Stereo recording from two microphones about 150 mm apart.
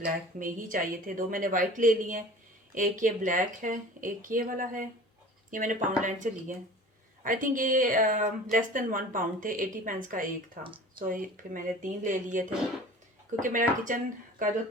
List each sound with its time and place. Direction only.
0.0 s a woman's voice: 65° right (ahead or behind)
10.6 s speech: 35° right (ahead or behind)
11.0 s a woman's voice: 65° right (ahead or behind)